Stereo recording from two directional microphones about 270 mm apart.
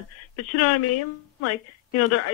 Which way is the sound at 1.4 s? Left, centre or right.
Left.